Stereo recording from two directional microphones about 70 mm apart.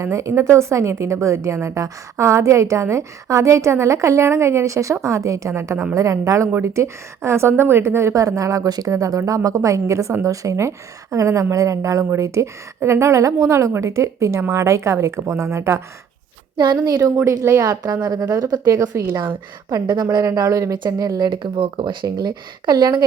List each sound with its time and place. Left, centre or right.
0.0 s a woman's voice: right
8.1 s a woman's voice: right
17.4 s a woman's voice: right
20.2 s a woman's voice: right
20.7 s a woman's voice: right
22.0 s a woman's voice: right